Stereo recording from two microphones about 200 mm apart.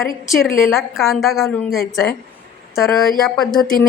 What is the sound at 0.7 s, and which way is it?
Speech, centre (ahead or behind).